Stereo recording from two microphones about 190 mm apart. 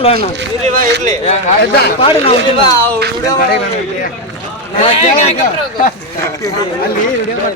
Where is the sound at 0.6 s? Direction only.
45° right (ahead or behind).